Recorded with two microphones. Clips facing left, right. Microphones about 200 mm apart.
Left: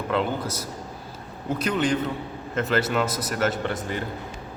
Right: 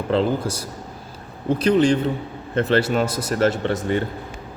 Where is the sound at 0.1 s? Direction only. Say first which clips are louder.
Right 6 dB; 30° right (ahead or behind).